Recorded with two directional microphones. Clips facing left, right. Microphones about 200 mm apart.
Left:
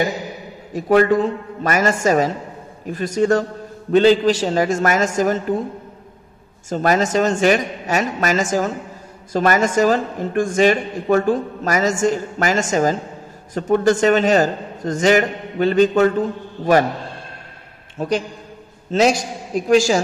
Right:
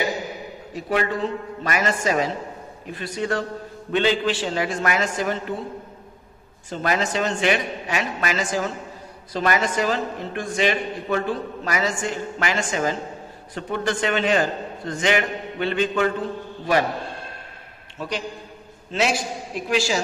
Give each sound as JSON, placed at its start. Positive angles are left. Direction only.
{"t": 0.7, "sound": "a man's voice", "side_deg": 45}
{"t": 6.7, "sound": "a man's voice", "side_deg": 45}
{"t": 17.9, "sound": "a man's voice", "side_deg": 45}